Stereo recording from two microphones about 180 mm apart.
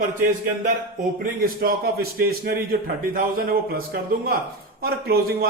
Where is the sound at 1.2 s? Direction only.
55° right (ahead or behind).